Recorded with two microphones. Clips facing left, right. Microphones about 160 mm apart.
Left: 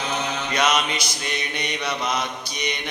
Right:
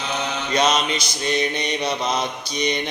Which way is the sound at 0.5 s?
30° right (ahead or behind).